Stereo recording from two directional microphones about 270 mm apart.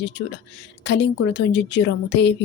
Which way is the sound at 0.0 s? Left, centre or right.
Left.